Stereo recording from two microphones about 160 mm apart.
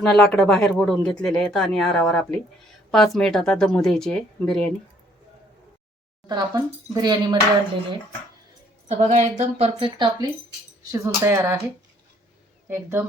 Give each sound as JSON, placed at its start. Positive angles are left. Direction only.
{"t": 0.0, "sound": "speech", "side_deg": 5}
{"t": 6.2, "sound": "speech", "side_deg": -25}
{"t": 8.9, "sound": "a woman's voice", "side_deg": -45}
{"t": 10.9, "sound": "speech", "side_deg": -20}
{"t": 12.6, "sound": "speech", "side_deg": -15}